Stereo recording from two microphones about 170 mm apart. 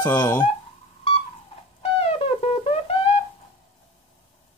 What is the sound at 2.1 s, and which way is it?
Music, 35° left (ahead or behind).